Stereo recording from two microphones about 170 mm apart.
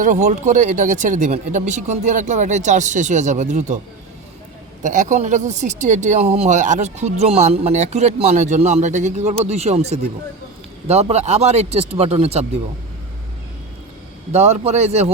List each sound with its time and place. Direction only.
0.0 s speech: 50° right (ahead or behind)
4.8 s speech: 45° right (ahead or behind)
14.3 s speech: 40° right (ahead or behind)